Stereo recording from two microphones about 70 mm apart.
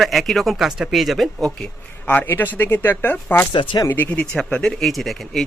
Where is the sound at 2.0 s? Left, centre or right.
Left.